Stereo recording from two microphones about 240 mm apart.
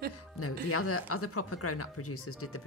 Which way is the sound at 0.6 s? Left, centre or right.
Left.